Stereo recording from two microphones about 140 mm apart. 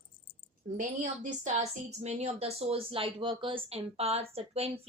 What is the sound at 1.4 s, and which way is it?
A woman's voice, 55° right (ahead or behind).